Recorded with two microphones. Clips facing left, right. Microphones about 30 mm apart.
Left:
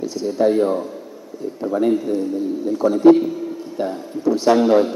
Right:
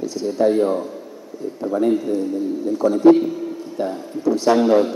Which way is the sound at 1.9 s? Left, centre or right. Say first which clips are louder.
Even; centre.